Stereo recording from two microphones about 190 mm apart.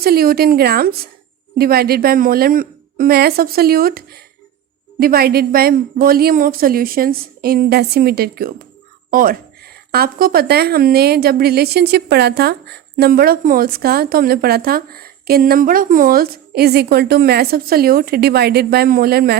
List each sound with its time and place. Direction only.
0.0 s speech: 55° right (ahead or behind)